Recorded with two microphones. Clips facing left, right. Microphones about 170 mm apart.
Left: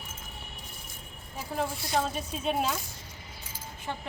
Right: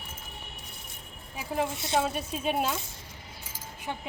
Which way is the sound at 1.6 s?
25° right (ahead or behind).